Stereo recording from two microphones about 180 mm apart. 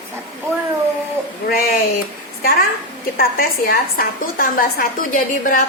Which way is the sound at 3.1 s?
55° left (ahead or behind).